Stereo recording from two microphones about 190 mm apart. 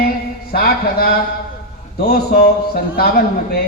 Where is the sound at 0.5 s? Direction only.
55° left (ahead or behind).